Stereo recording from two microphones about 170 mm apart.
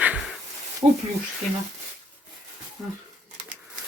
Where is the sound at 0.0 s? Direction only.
5° right (ahead or behind).